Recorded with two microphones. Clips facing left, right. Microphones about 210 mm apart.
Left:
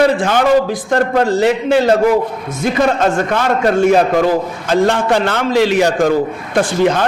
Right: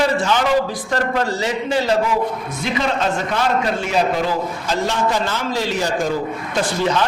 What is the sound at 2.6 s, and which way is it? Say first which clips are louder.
A man's voice: left 7 dB; 50° left (ahead or behind).